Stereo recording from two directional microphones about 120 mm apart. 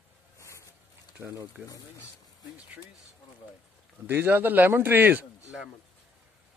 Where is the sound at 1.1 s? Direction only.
20° right (ahead or behind).